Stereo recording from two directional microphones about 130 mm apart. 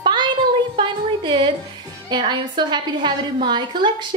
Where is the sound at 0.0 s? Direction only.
35° right (ahead or behind).